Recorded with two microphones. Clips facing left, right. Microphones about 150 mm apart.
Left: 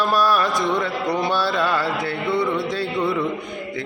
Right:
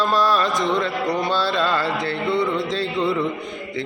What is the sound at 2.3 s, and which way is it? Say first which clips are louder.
Music: even; 20° right (ahead or behind).